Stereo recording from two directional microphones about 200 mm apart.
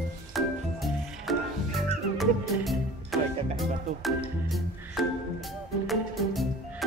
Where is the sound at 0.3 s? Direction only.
Centre (ahead or behind).